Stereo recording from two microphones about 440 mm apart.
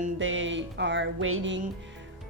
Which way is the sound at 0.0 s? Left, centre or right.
Right.